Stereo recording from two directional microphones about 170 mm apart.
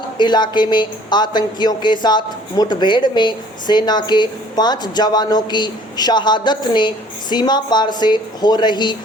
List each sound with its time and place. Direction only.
0.2 s a woman's voice: 25° left (ahead or behind)